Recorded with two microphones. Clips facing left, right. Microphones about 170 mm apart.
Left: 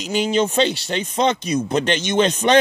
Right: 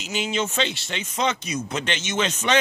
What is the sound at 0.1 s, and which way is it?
A man's voice, 35° left (ahead or behind).